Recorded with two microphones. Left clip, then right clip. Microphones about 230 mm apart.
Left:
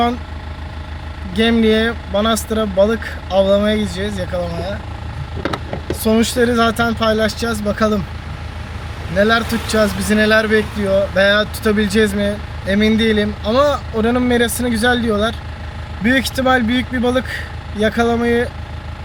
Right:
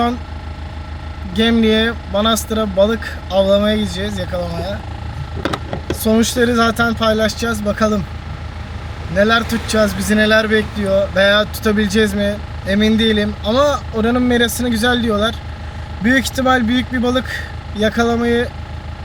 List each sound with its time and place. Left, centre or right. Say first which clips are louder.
1.4 s speech: even; centre
5.4 s a sound: right 1 dB; centre
6.0 s speech: even; centre
9.1 s speech: right 1 dB; centre